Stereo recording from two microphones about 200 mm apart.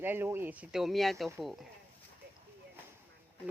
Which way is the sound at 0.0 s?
10° right (ahead or behind).